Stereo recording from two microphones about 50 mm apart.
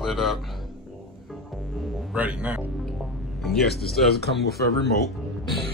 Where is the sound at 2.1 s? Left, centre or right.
Right.